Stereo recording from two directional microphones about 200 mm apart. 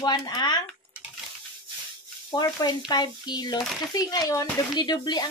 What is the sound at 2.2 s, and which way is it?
Sizzle, 20° left (ahead or behind).